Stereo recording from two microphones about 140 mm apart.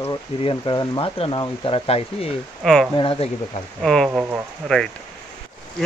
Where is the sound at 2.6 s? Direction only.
5° left (ahead or behind).